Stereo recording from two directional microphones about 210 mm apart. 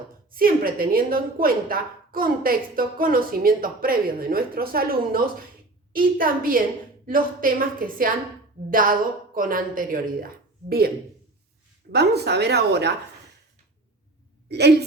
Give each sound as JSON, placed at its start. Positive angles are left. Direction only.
{"t": 0.3, "sound": "a woman's voice", "side_deg": -45}
{"t": 14.4, "sound": "speech", "side_deg": -50}